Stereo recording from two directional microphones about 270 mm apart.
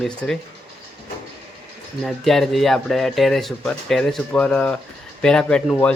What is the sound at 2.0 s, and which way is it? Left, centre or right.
Speech, centre.